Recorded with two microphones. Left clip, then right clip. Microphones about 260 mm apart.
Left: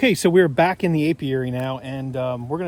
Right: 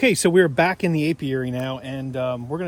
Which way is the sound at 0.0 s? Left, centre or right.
Left.